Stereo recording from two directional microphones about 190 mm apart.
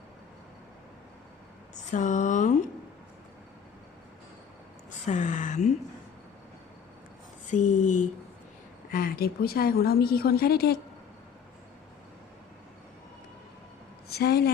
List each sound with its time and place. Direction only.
1.7 s speech: 40° left (ahead or behind)
4.9 s speech: 40° left (ahead or behind)
7.5 s speech: 40° left (ahead or behind)
14.1 s a woman's voice: 55° left (ahead or behind)